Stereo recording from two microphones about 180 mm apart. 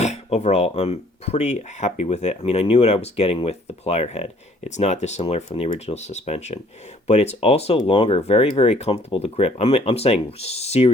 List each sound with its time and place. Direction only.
0.0 s speech: 40° left (ahead or behind)